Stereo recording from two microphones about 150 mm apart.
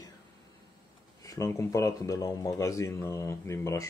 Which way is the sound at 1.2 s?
20° left (ahead or behind).